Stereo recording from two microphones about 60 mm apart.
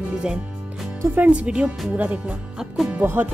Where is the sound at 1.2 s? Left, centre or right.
Centre.